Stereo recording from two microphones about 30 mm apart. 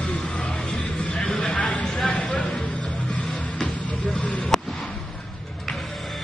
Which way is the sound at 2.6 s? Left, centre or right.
Left.